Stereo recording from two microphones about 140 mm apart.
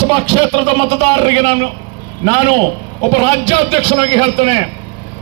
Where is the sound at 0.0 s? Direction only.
35° right (ahead or behind).